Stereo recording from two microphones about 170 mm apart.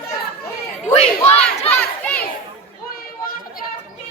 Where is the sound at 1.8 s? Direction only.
10° left (ahead or behind).